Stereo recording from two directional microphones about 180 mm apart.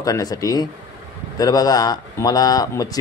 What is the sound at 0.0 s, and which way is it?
Speech, 20° left (ahead or behind).